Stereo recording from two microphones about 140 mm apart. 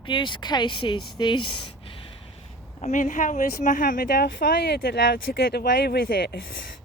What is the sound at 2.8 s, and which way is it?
Speech, 65° left (ahead or behind).